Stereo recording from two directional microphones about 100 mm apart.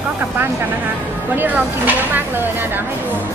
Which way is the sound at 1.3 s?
20° right (ahead or behind).